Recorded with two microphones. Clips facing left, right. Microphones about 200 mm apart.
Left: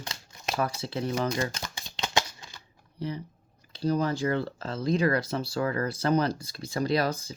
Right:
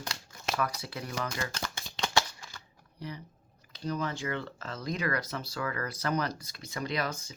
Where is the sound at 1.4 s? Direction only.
15° left (ahead or behind).